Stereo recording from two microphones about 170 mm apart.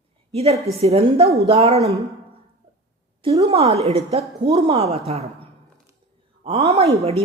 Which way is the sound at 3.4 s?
35° right (ahead or behind).